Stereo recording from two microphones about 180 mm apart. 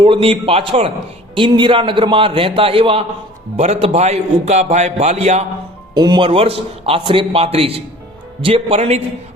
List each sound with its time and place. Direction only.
0.0 s a man's voice: 30° right (ahead or behind)
5.9 s a man's voice: 25° right (ahead or behind)